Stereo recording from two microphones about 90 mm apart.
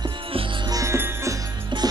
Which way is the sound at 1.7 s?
60° right (ahead or behind).